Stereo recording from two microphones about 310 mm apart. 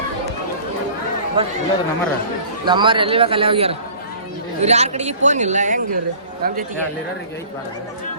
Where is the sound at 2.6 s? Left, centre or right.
Centre.